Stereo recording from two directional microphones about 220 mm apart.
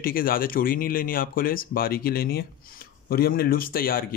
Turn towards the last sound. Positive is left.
turn(degrees=40)  # may be behind; listen again after turning